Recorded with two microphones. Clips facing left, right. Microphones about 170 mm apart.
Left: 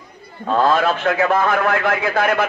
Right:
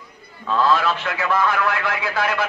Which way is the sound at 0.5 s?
50° left (ahead or behind).